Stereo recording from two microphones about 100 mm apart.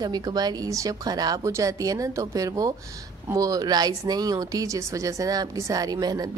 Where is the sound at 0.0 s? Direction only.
45° right (ahead or behind).